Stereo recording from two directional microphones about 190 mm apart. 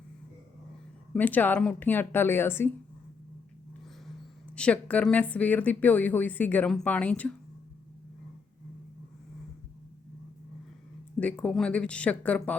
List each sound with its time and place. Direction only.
1.1 s a woman's voice: 10° left (ahead or behind)
4.5 s a woman's voice: 5° left (ahead or behind)
11.2 s a woman's voice: 5° left (ahead or behind)